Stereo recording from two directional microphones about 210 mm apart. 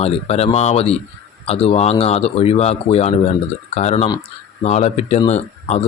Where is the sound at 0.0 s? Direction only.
30° left (ahead or behind).